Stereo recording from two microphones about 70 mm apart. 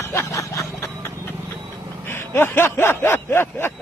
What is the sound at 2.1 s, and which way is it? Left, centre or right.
A man's voice, left.